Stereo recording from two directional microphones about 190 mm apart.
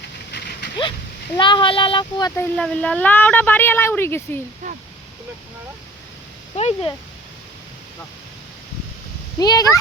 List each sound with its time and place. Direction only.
0.3 s a sound: 60° left (ahead or behind)
1.4 s speech: 25° left (ahead or behind)
2.3 s speech: 10° left (ahead or behind)
4.6 s speech: 40° right (ahead or behind)
6.6 s speech: 35° left (ahead or behind)
9.4 s speech: 20° left (ahead or behind)